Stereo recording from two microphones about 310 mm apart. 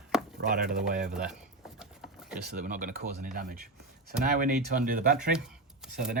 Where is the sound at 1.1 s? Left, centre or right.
Centre.